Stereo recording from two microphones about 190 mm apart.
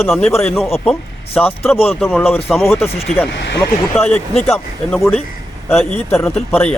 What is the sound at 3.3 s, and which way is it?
Speech, 65° left (ahead or behind).